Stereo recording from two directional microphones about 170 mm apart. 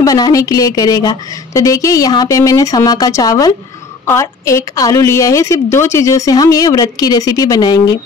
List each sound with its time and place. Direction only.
0.0 s a woman's voice: 20° left (ahead or behind)